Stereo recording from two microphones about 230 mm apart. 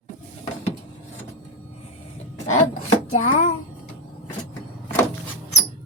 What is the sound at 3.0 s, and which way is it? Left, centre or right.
Speech, left.